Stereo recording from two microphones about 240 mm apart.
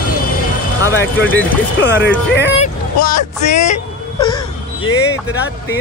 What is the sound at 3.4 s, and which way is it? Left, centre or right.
Speech, left.